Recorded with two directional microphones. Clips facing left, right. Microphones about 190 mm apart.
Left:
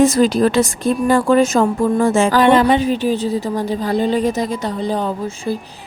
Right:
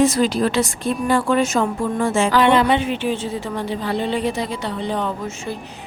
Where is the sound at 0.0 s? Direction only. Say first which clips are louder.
Left 4 dB; 45° left (ahead or behind).